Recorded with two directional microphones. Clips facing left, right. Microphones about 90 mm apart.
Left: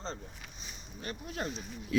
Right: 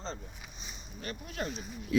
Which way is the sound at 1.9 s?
20° right (ahead or behind).